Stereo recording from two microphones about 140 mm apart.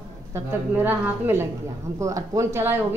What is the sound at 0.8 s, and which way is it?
A woman's voice, 15° right (ahead or behind).